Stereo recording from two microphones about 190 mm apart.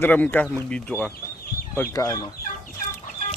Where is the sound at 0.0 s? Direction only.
10° left (ahead or behind).